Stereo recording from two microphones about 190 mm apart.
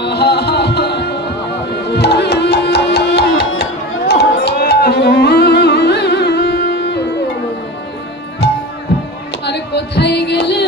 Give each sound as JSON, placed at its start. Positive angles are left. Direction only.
{"t": 0.0, "sound": "music", "side_deg": 60}
{"t": 8.4, "sound": "music", "side_deg": 60}
{"t": 9.4, "sound": "a sound", "side_deg": 60}